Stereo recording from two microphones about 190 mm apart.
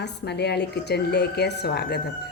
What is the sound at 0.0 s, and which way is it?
A woman's voice, 60° left (ahead or behind).